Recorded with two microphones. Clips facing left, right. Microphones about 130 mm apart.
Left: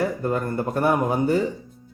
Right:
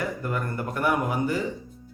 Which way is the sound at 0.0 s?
30° left (ahead or behind).